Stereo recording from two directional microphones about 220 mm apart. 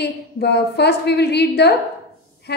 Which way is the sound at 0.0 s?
50° left (ahead or behind).